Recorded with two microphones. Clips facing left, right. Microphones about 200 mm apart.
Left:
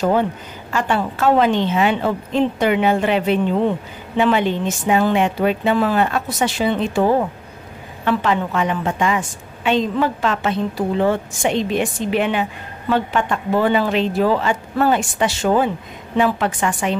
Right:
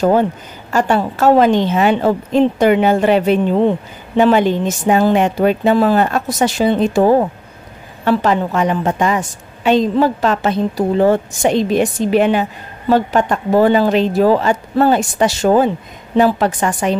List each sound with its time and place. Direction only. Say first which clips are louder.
0.7 s a woman's voice: right 5 dB; 40° right (ahead or behind)